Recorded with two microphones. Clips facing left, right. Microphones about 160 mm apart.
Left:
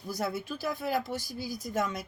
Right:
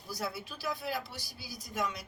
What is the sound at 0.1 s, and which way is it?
Speech, 50° left (ahead or behind).